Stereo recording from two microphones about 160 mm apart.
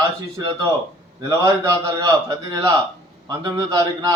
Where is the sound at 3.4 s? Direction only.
25° right (ahead or behind).